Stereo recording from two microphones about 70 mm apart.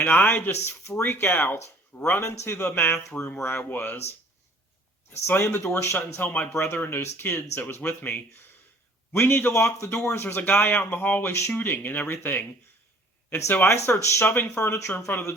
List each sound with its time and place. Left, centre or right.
0.0 s a man's voice: left
5.1 s a man's voice: left
5.7 s a man's voice: left
6.2 s a man's voice: left
13.9 s a man's voice: left
14.6 s a man's voice: left